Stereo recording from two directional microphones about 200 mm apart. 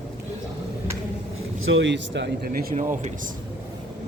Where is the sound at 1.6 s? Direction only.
65° right (ahead or behind).